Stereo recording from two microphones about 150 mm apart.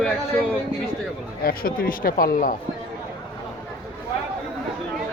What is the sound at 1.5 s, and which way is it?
Speech, 75° left (ahead or behind).